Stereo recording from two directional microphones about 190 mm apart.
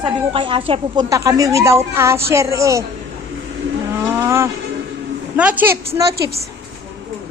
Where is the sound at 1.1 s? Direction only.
15° right (ahead or behind).